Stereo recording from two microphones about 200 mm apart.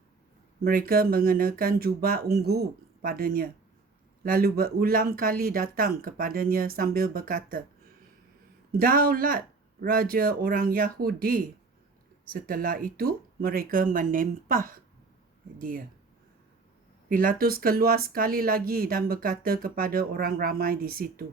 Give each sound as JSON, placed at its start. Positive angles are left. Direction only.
{"t": 0.6, "sound": "speech", "side_deg": -50}
{"t": 8.8, "sound": "speech", "side_deg": -45}
{"t": 17.1, "sound": "speech", "side_deg": -45}